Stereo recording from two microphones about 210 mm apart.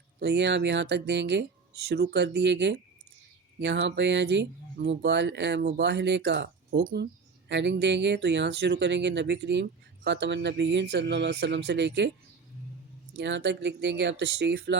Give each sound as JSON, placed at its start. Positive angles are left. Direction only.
{"t": 0.2, "sound": "speech", "side_deg": -55}
{"t": 13.1, "sound": "speech", "side_deg": -55}